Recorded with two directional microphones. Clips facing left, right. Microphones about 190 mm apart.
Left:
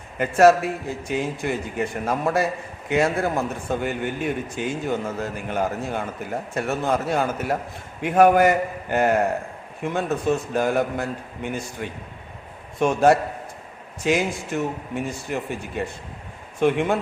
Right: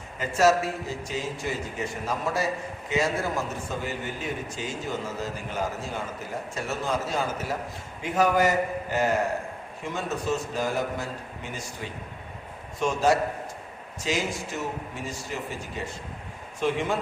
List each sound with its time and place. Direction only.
0.2 s a man's voice: 60° left (ahead or behind)